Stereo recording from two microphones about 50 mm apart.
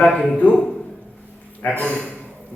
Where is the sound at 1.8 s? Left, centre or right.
Left.